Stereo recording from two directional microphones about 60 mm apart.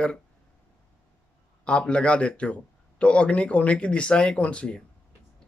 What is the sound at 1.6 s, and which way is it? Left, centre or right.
Speech, centre.